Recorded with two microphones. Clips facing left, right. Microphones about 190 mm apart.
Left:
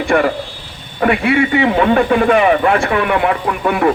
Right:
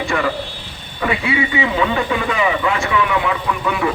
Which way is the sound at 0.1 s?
55° left (ahead or behind).